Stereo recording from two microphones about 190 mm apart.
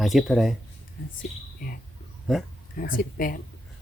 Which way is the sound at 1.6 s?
50° left (ahead or behind).